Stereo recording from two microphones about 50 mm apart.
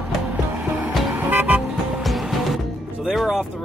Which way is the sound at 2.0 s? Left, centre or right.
Centre.